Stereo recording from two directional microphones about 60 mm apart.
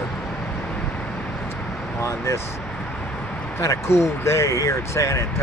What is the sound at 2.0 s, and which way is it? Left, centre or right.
Speech, left.